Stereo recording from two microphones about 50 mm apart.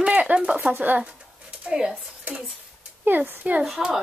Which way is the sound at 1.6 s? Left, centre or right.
Centre.